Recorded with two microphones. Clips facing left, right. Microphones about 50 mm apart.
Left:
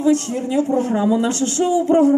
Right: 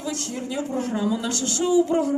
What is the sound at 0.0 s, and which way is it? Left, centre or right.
Speech, left.